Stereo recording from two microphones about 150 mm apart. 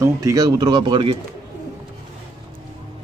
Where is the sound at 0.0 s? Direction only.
20° right (ahead or behind).